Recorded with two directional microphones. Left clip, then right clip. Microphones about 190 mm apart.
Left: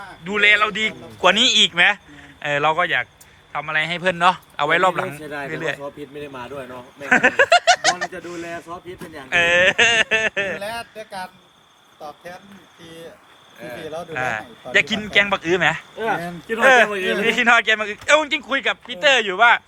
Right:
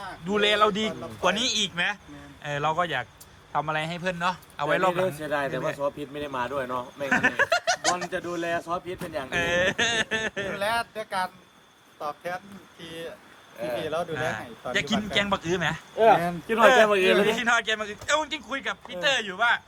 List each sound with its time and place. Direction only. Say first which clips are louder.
0.3 s speech: left 6 dB; 15° right (ahead or behind)
1.2 s a man's voice: left 10 dB; centre (ahead or behind)